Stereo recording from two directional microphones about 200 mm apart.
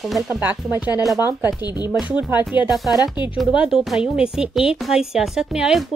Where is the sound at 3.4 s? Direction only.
5° right (ahead or behind).